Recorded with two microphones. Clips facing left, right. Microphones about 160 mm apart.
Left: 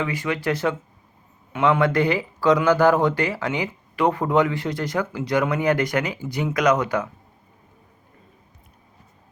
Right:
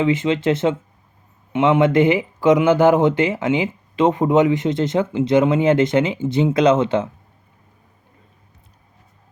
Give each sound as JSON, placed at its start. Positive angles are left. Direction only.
{"t": 0.0, "sound": "speech", "side_deg": -20}